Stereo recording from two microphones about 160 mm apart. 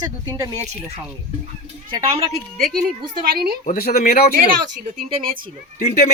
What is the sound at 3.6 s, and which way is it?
Speech, 65° left (ahead or behind).